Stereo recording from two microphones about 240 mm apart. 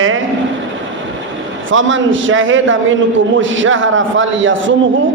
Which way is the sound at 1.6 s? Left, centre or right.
Right.